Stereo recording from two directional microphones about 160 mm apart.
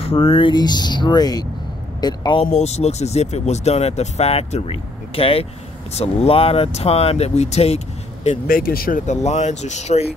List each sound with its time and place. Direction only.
0.0 s speech: 35° left (ahead or behind)
8.5 s speech: 65° left (ahead or behind); by 10.0 s 45° left (ahead or behind)